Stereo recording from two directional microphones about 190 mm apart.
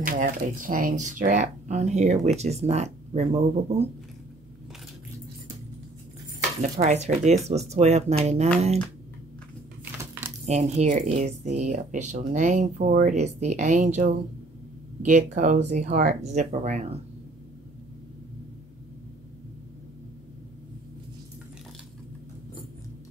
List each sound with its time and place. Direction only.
0.0 s speech: 45° right (ahead or behind)
6.6 s speech: 35° right (ahead or behind)
10.4 s speech: 35° right (ahead or behind)